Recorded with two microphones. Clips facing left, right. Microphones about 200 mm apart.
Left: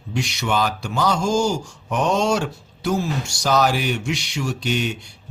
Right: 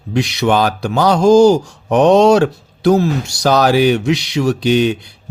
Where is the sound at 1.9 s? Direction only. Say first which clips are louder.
Right 11 dB; 65° right (ahead or behind); by 3.9 s 90° right.